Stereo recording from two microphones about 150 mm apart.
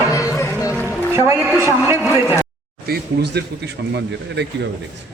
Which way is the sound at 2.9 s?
90° right.